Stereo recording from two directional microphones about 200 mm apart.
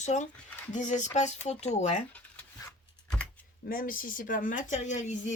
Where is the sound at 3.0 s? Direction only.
5° left (ahead or behind).